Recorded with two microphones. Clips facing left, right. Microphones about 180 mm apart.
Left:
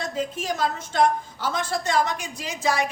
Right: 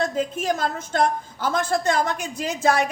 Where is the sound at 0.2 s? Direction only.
50° right (ahead or behind).